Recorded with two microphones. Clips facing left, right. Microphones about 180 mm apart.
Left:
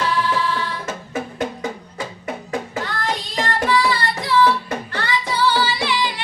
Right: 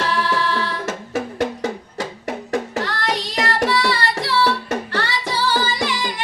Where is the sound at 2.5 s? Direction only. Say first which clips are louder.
Right 4 dB; 80° right.